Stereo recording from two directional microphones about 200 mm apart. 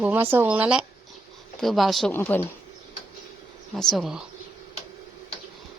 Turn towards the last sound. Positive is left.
turn(degrees=0)  # may be behind; listen again after turning